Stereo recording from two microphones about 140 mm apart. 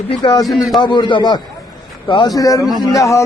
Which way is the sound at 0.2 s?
30° left (ahead or behind).